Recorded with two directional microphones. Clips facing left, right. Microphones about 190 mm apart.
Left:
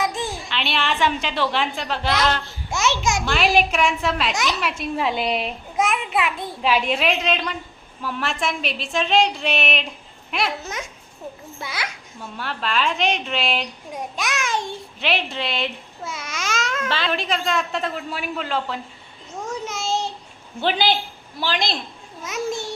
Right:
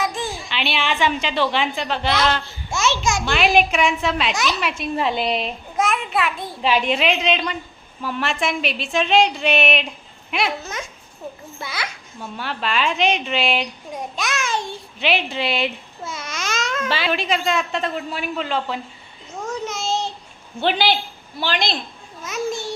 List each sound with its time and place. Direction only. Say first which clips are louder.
0.0 s a sound: even; 20° left (ahead or behind)
0.4 s a woman's voice: right 2 dB; centre (ahead or behind)
2.7 s a child's voice: right 1 dB; 15° left (ahead or behind)
3.2 s a woman's voice: right 2 dB; centre (ahead or behind); by 6.3 s 15° left (ahead or behind)
6.6 s a woman's voice: right 1 dB; 5° left (ahead or behind)
11.6 s a child's voice: right 1 dB; 10° left (ahead or behind)
12.4 s a woman's voice: right 1 dB; centre (ahead or behind)
13.9 s a sound: even; 10° left (ahead or behind)
14.9 s a woman's voice: right 3 dB; centre (ahead or behind)
16.0 s a child's voice: even; 10° left (ahead or behind)
19.5 s a sound: right 1 dB; 10° left (ahead or behind)
20.6 s a woman's voice: right 1 dB; 5° left (ahead or behind)